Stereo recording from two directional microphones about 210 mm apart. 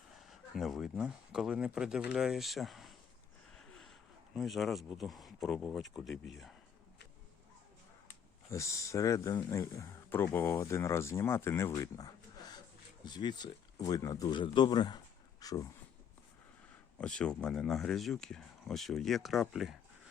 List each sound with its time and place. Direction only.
0.2 s speech: centre (ahead or behind)
3.5 s a sound: centre (ahead or behind)
4.4 s speech: centre (ahead or behind)
8.4 s speech: 15° left (ahead or behind)
17.0 s speech: 5° left (ahead or behind)